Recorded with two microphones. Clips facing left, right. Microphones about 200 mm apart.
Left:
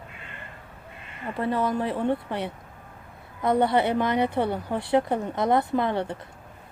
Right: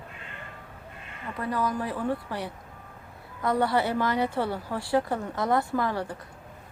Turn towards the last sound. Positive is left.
turn(degrees=25)  # may be behind; listen again after turning